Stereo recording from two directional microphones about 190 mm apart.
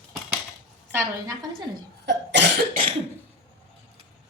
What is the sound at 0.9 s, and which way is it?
Speech, 20° right (ahead or behind).